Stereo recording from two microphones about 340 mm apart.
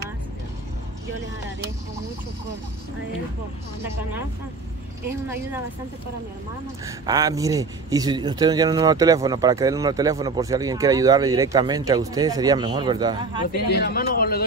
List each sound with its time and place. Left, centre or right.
6.8 s speech: centre
13.7 s a man's voice: left